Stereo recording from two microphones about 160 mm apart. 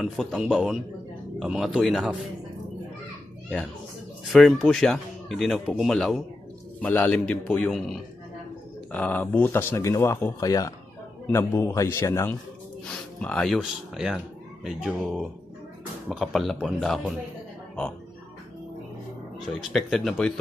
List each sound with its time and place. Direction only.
0.0 s speech: centre (ahead or behind)
4.2 s speech: centre (ahead or behind)
19.7 s speech: centre (ahead or behind)